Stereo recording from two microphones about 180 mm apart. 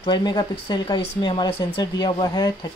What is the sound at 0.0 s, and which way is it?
Speech, 25° left (ahead or behind).